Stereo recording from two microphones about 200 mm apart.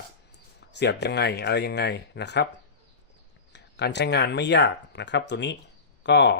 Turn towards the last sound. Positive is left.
turn(degrees=60)  # may be behind; listen again after turning